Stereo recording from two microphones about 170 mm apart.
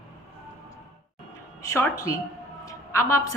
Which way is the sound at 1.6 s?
15° left (ahead or behind).